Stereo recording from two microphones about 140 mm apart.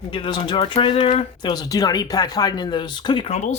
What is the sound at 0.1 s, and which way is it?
Speech, 35° left (ahead or behind).